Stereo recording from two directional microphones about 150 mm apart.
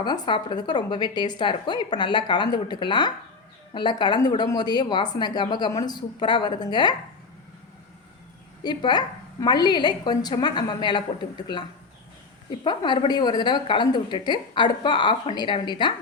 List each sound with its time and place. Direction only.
0.0 s a woman's voice: 30° left (ahead or behind)
8.6 s a woman's voice: 30° left (ahead or behind)
12.6 s a woman's voice: 30° left (ahead or behind)